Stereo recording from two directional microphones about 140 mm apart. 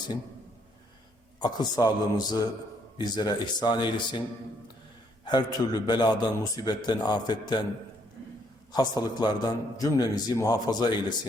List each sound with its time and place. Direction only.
1.4 s a man's voice: 30° left (ahead or behind)
5.2 s a man's voice: 30° left (ahead or behind)
8.7 s a man's voice: 30° left (ahead or behind)